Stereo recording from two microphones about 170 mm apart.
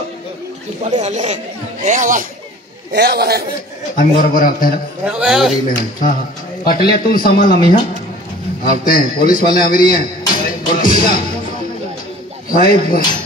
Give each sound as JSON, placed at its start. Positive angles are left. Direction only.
{"t": 0.8, "sound": "speech", "side_deg": -40}
{"t": 2.9, "sound": "a man's voice", "side_deg": -70}
{"t": 3.9, "sound": "a man's voice", "side_deg": 55}
{"t": 5.0, "sound": "a man's voice", "side_deg": -5}
{"t": 6.6, "sound": "a man's voice", "side_deg": 60}
{"t": 8.6, "sound": "a man's voice", "side_deg": 55}
{"t": 9.9, "sound": "music", "side_deg": 60}
{"t": 12.4, "sound": "a man's voice", "side_deg": 55}